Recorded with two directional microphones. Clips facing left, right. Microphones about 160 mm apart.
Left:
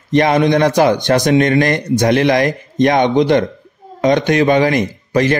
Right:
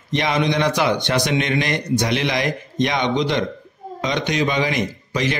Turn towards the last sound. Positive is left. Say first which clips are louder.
# left 7 dB
turn(degrees=50)  # may be behind; listen again after turning